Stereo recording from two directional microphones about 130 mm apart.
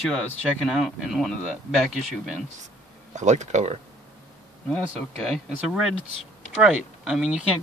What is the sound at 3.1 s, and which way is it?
Speech, 65° right (ahead or behind).